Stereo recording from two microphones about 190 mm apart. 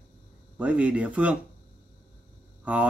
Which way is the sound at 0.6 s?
5° right (ahead or behind).